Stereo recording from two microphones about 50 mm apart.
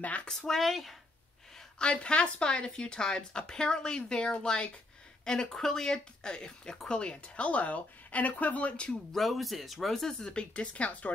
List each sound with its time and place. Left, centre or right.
0.0 s speech: left
0.3 s speech: centre
1.8 s speech: centre
9.1 s speech: centre
10.5 s speech: left